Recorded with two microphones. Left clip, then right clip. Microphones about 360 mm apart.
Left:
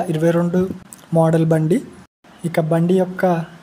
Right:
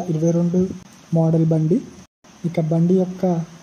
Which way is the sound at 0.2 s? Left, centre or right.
Left.